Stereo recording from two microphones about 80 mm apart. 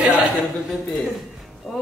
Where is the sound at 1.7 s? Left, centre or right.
Centre.